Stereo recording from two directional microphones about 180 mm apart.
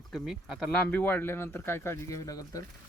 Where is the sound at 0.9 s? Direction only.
10° left (ahead or behind).